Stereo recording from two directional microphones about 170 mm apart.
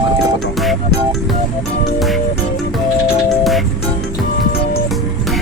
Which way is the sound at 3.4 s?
Centre (ahead or behind).